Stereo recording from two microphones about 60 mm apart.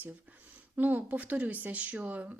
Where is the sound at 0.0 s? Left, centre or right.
Right.